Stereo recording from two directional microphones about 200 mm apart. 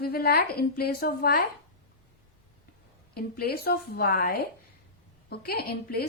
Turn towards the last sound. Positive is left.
turn(degrees=50)  # may be behind; listen again after turning